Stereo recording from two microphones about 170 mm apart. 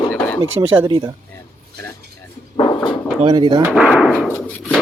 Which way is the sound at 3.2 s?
30° right (ahead or behind).